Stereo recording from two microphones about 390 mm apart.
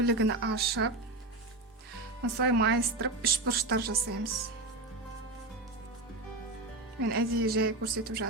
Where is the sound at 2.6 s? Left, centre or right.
Right.